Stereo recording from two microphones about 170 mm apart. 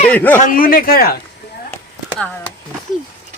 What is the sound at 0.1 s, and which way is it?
Speech, 10° left (ahead or behind).